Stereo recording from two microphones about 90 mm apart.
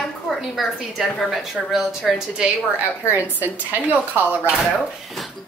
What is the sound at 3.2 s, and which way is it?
Speech, 20° right (ahead or behind).